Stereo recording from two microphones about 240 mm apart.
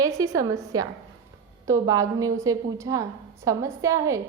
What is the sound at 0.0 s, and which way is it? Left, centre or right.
A woman's voice, centre.